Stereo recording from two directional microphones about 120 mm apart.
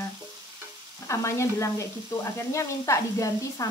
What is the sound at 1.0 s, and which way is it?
A child's voice, 25° left (ahead or behind).